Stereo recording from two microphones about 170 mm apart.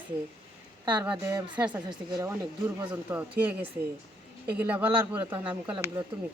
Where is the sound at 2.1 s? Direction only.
20° right (ahead or behind).